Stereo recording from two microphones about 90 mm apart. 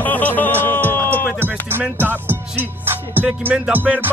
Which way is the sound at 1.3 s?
25° right (ahead or behind).